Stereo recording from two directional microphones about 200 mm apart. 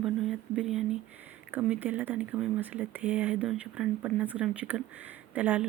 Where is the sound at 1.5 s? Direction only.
10° right (ahead or behind).